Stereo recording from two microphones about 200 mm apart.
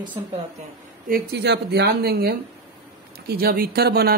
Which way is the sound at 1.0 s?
50° right (ahead or behind).